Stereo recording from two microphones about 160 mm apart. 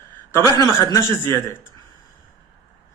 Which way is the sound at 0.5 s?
20° left (ahead or behind).